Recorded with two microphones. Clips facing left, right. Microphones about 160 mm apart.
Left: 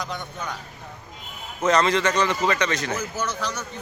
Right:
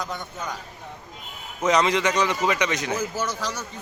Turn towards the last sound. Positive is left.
turn(degrees=-10)  # may be behind; listen again after turning